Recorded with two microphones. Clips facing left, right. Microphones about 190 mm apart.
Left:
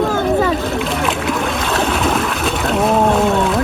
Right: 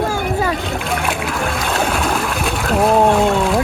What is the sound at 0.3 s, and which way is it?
Splash, centre (ahead or behind).